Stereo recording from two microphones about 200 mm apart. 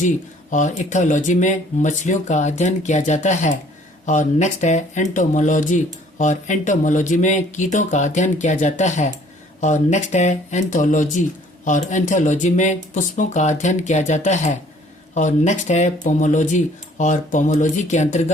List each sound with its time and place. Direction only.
0.5 s speech: 40° left (ahead or behind)